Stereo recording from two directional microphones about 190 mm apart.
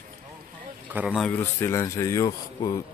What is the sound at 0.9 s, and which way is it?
Speech, centre (ahead or behind).